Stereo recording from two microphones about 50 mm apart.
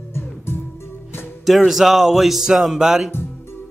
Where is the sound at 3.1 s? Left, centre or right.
Left.